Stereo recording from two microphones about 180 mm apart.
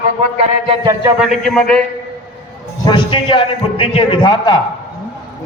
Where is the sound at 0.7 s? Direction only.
25° right (ahead or behind).